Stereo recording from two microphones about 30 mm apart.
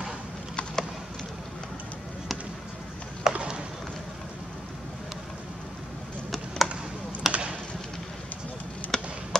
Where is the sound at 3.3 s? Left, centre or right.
Right.